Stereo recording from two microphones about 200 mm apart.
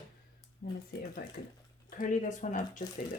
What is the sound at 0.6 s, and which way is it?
Speech, 45° left (ahead or behind).